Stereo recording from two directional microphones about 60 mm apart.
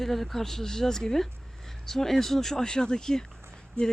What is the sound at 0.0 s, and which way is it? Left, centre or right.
Speech, centre.